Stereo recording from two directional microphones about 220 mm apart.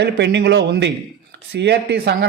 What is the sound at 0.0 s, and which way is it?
Speech, 50° right (ahead or behind).